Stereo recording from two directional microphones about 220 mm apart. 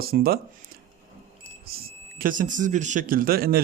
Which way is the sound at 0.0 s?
45° right (ahead or behind).